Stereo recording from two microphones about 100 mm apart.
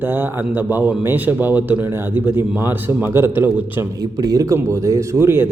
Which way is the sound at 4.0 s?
40° right (ahead or behind).